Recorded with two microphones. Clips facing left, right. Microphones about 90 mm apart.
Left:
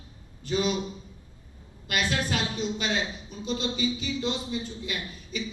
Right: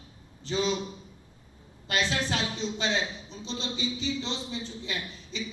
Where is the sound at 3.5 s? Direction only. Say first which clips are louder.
Left 5 dB; 25° right (ahead or behind).